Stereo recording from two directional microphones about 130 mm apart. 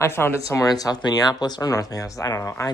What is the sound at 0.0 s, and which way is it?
Speech, 20° left (ahead or behind).